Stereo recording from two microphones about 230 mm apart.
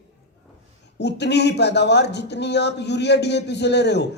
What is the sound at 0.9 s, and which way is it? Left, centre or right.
Speech, left.